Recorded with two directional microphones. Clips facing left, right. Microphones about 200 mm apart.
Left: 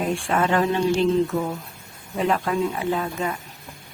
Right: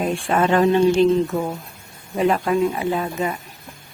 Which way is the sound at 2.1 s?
15° right (ahead or behind).